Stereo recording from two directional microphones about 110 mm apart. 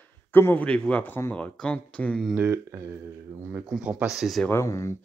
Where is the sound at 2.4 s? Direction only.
20° right (ahead or behind); by 4.4 s centre (ahead or behind).